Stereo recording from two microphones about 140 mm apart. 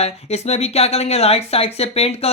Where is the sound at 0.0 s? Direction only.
50° left (ahead or behind).